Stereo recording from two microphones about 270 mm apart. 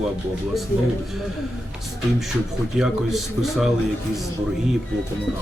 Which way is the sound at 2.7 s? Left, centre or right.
Centre.